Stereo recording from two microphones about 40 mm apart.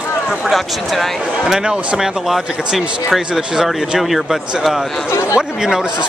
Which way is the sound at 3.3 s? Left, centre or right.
Centre.